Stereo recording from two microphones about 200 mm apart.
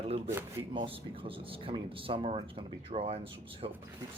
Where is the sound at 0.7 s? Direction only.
25° right (ahead or behind).